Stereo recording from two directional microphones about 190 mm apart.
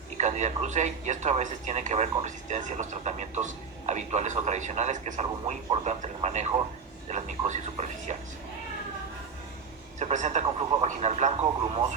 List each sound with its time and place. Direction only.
0.2 s a man's voice: 35° right (ahead or behind)
10.0 s a man's voice: 40° right (ahead or behind)